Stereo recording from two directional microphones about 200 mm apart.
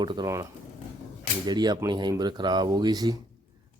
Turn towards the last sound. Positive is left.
turn(degrees=-20)  # may be behind; listen again after turning